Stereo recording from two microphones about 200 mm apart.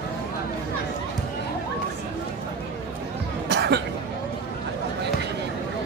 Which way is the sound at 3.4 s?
55° right (ahead or behind).